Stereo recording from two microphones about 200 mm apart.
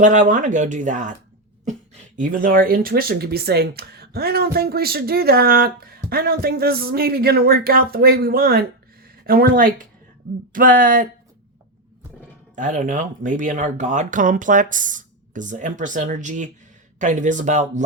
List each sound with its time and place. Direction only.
0.0 s speech: 40° right (ahead or behind)
2.1 s speech: 45° right (ahead or behind)
12.5 s speech: 40° right (ahead or behind)